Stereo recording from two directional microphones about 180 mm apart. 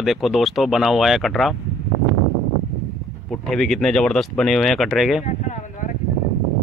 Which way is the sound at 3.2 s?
Centre (ahead or behind).